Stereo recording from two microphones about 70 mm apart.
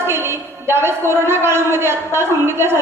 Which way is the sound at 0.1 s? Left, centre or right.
Right.